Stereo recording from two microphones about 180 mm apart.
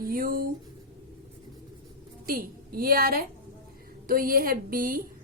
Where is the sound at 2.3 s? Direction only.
55° right (ahead or behind).